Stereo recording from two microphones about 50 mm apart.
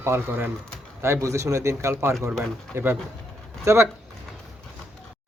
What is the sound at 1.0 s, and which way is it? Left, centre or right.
A man's voice, right.